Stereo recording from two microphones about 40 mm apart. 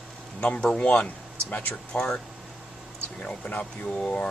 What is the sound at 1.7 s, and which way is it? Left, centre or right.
Speech, left.